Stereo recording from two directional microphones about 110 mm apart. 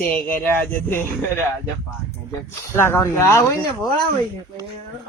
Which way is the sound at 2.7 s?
25° left (ahead or behind).